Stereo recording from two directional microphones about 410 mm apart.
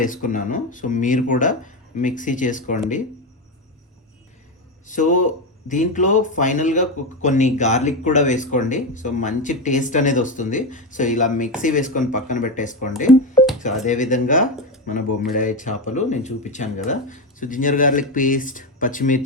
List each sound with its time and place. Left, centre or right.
0.0 s speech: centre
4.9 s speech: centre